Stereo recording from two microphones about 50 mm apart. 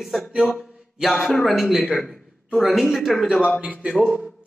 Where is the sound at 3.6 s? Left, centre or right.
Right.